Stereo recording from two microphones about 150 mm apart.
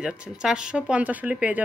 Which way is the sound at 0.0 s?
5° right (ahead or behind).